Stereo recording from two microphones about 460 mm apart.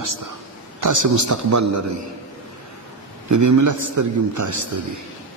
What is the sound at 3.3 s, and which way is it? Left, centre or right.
A man's voice, right.